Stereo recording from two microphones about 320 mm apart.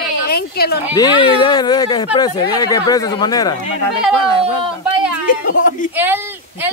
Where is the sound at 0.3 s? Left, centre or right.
Left.